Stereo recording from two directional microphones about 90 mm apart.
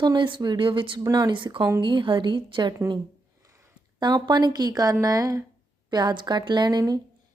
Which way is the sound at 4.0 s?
50° right (ahead or behind).